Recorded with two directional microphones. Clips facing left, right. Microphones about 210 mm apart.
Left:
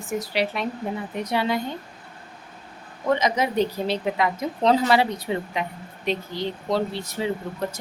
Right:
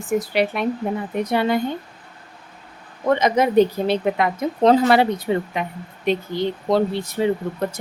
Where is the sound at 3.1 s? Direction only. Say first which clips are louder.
Right 10 dB; 55° right (ahead or behind).